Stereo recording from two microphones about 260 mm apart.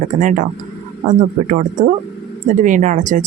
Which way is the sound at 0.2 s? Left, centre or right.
Right.